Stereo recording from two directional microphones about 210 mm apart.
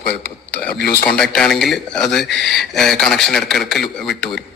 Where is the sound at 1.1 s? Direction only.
5° left (ahead or behind).